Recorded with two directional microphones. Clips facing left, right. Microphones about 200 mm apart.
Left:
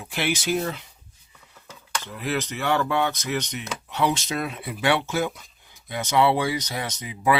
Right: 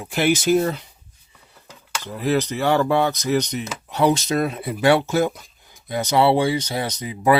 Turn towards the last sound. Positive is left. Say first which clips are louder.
# right 5 dB
turn(degrees=-40)  # may be behind; listen again after turning